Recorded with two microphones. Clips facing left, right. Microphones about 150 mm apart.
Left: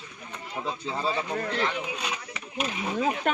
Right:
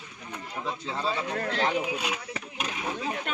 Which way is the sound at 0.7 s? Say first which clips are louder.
Left 1 dB; 5° left (ahead or behind).